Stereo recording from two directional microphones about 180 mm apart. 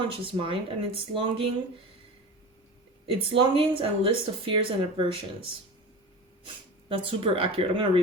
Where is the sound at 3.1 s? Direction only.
30° right (ahead or behind).